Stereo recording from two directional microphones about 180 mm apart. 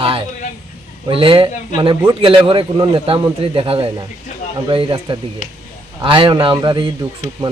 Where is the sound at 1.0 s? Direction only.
30° right (ahead or behind).